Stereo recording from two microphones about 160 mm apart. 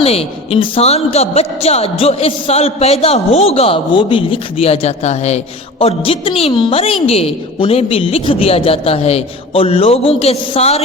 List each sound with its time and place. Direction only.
0.0 s a man's voice: 40° left (ahead or behind)